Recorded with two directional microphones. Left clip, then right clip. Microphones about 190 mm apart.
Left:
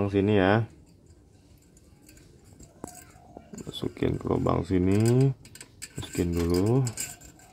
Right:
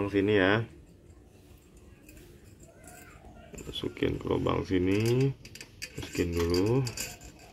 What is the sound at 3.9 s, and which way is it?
Speech, 50° left (ahead or behind).